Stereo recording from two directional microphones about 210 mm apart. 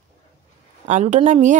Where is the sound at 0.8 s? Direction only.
35° right (ahead or behind).